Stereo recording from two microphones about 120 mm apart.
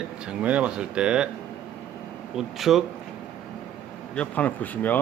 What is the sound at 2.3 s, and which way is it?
Speech, centre (ahead or behind).